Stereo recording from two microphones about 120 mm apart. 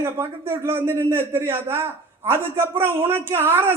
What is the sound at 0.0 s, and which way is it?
Speech, 25° right (ahead or behind).